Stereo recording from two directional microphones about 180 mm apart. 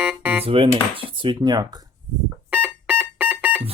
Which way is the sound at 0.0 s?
5° right (ahead or behind).